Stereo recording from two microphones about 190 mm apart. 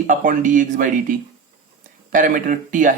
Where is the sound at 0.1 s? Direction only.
45° right (ahead or behind).